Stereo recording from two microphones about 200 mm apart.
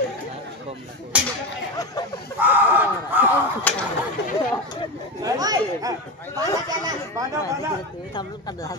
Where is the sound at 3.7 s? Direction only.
10° left (ahead or behind).